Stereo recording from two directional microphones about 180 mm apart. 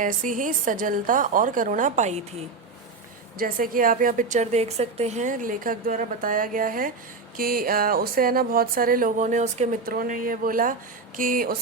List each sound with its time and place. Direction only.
0.0 s a woman's voice: 45° right (ahead or behind)
3.3 s a woman's voice: 50° right (ahead or behind)
9.8 s a woman's voice: 55° right (ahead or behind)